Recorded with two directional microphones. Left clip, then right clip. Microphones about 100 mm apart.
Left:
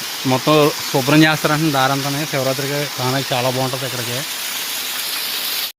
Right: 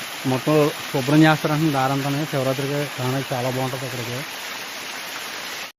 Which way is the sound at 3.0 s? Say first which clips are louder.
Left 6 dB; 25° left (ahead or behind).